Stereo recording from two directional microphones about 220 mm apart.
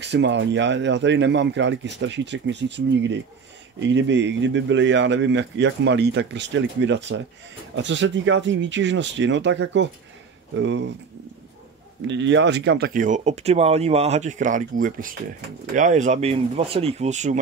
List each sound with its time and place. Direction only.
0.0 s speech: 50° right (ahead or behind)
12.1 s speech: 55° right (ahead or behind); by 17.4 s 30° right (ahead or behind)